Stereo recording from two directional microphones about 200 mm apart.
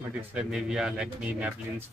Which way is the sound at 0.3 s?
5° right (ahead or behind).